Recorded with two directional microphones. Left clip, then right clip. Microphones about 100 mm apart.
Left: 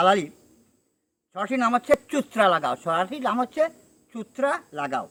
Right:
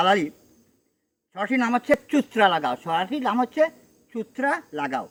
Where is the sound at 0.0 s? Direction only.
20° left (ahead or behind).